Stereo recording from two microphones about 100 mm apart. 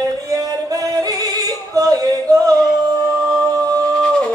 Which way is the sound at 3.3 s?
35° right (ahead or behind).